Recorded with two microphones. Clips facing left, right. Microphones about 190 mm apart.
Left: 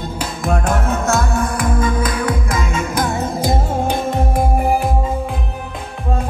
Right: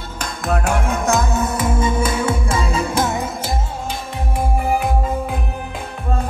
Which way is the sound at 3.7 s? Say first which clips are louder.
Left 9 dB; 55° left (ahead or behind).